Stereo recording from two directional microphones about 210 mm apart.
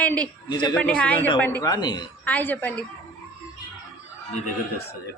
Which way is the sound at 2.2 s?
10° left (ahead or behind).